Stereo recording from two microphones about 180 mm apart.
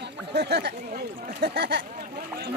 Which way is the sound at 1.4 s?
70° right (ahead or behind).